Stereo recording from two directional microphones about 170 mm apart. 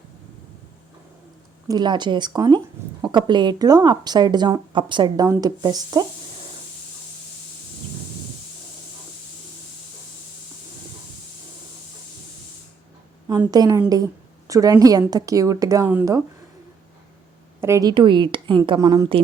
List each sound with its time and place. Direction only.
1.6 s speech: 25° right (ahead or behind)
13.5 s speech: 25° right (ahead or behind)
17.6 s speech: 20° right (ahead or behind)